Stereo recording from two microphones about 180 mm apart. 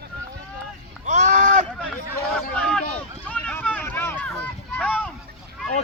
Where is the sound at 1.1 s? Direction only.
45° right (ahead or behind).